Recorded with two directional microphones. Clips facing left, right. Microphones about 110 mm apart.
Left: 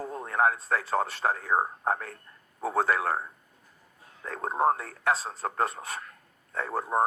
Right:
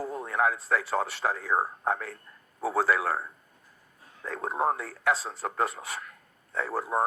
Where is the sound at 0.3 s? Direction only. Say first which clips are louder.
Left 1 dB; 35° left (ahead or behind).